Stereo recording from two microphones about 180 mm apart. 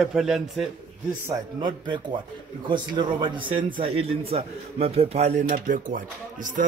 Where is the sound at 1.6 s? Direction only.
25° right (ahead or behind).